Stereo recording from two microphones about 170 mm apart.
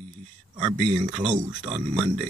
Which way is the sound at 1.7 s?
30° right (ahead or behind).